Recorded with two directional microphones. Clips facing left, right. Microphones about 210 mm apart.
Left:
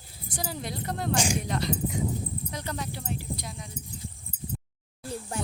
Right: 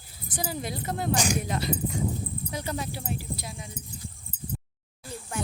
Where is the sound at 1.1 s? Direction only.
30° left (ahead or behind).